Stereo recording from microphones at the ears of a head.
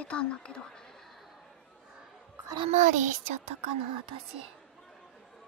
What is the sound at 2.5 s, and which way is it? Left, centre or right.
Speech, right.